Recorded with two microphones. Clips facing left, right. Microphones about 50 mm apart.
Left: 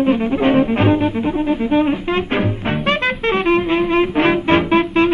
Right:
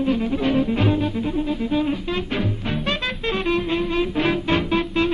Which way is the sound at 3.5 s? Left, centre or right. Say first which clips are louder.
Left 6 dB; left.